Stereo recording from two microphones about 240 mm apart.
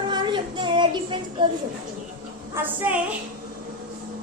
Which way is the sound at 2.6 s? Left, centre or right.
Centre.